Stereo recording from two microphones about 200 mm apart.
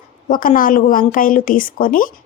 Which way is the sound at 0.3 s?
45° left (ahead or behind).